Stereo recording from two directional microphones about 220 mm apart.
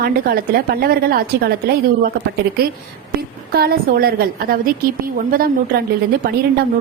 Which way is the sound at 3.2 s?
45° right (ahead or behind).